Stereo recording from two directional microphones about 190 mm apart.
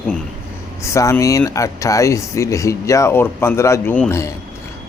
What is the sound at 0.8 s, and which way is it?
Speech, 15° left (ahead or behind).